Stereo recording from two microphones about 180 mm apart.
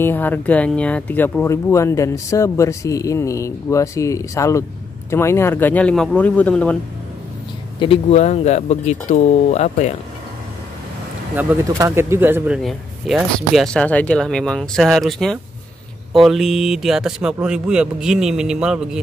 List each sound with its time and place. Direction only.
0.0 s speech: 10° left (ahead or behind)
7.8 s speech: 35° left (ahead or behind)
11.3 s speech: 15° right (ahead or behind)